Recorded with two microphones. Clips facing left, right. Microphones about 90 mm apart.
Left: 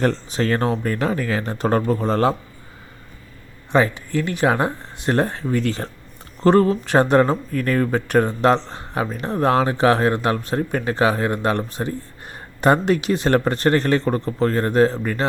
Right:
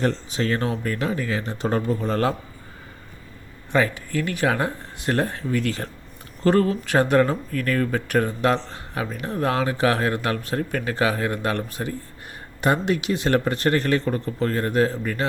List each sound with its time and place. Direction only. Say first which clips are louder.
0.0 s speech: left 3 dB; 40° left (ahead or behind)
1.2 s speech: left 3 dB; 50° left (ahead or behind)
2.0 s speech: left 4 dB; 30° left (ahead or behind)
3.7 s speech: left 3 dB; 25° left (ahead or behind)